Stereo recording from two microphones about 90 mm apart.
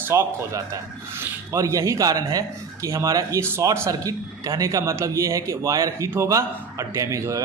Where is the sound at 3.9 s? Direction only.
40° right (ahead or behind).